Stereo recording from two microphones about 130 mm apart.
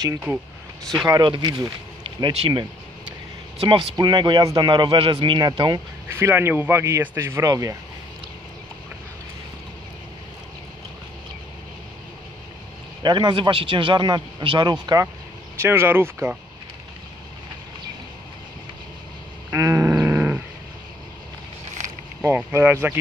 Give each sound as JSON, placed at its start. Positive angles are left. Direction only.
{"t": 1.0, "sound": "a man's voice", "side_deg": -35}
{"t": 6.0, "sound": "speech", "side_deg": -20}
{"t": 13.0, "sound": "a man's voice", "side_deg": -35}
{"t": 15.6, "sound": "speech", "side_deg": -20}
{"t": 19.5, "sound": "wild animals", "side_deg": -25}
{"t": 22.2, "sound": "speech", "side_deg": -15}